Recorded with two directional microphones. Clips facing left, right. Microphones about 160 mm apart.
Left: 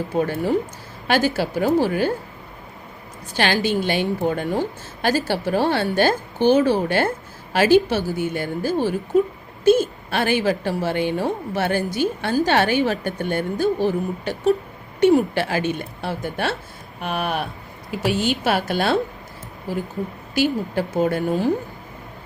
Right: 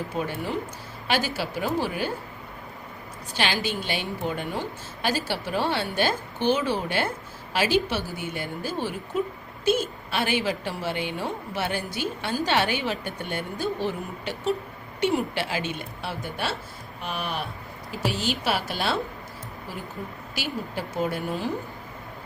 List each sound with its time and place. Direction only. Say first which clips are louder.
0.2 s a woman's voice: left 9 dB; 45° left (ahead or behind)
3.3 s a woman's voice: left 7 dB; 50° left (ahead or behind)
20.3 s a woman's voice: left 11 dB; 50° left (ahead or behind)